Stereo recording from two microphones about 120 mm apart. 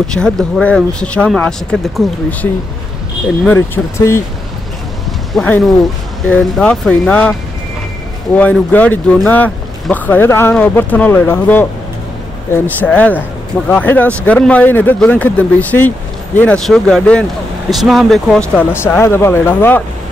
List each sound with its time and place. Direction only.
0.0 s speech: 5° left (ahead or behind)
3.5 s speech: 20° left (ahead or behind)
5.3 s speech: 5° left (ahead or behind)
8.4 s speech: 10° left (ahead or behind)
12.6 s speech: 15° left (ahead or behind)